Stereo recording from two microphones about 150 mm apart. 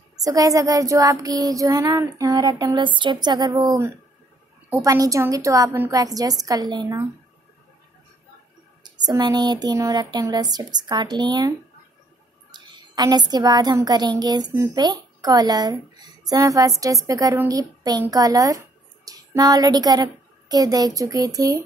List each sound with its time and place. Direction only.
0.2 s child singing: 25° right (ahead or behind)
8.8 s child singing: 25° right (ahead or behind)
12.4 s a woman's voice: 30° right (ahead or behind)